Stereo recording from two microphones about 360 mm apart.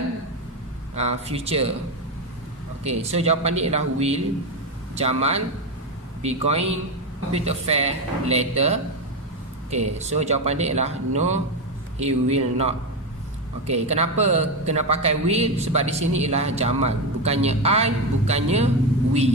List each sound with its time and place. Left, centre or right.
0.9 s a man's voice: centre
2.8 s a man's voice: centre